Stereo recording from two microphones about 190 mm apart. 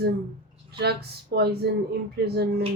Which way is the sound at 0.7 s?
60° right (ahead or behind).